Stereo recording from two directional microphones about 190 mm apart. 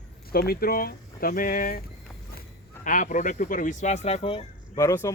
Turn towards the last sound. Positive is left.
turn(degrees=15)  # may be behind; listen again after turning